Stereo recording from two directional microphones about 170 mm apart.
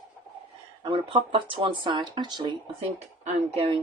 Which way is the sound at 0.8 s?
30° right (ahead or behind).